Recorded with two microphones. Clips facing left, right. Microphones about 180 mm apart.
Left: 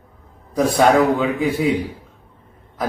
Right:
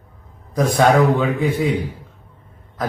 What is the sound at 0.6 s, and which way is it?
A man's voice, 5° left (ahead or behind).